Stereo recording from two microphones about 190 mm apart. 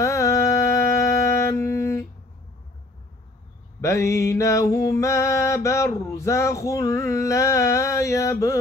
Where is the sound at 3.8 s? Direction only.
15° left (ahead or behind).